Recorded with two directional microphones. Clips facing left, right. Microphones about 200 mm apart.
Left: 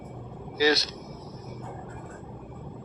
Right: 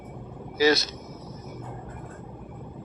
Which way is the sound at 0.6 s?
50° right (ahead or behind).